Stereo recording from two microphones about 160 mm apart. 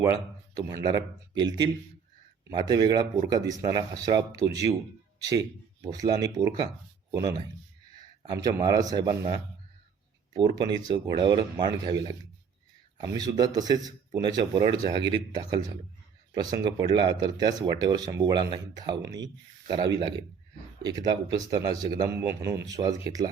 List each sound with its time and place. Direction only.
0.5 s speech: 20° right (ahead or behind)
5.8 s speech: 25° right (ahead or behind)
10.3 s speech: 30° right (ahead or behind)
21.3 s a man's voice: 25° right (ahead or behind)